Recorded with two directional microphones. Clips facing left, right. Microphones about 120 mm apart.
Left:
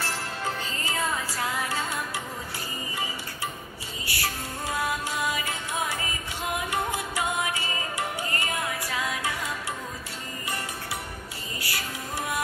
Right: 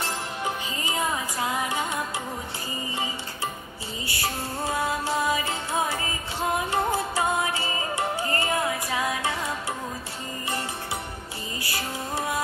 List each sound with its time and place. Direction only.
0.0 s music: 15° right (ahead or behind)
4.0 s music: 25° right (ahead or behind)
11.6 s music: 25° right (ahead or behind)